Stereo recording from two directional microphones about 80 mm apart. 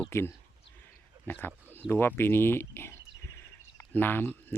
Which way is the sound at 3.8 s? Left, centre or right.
Left.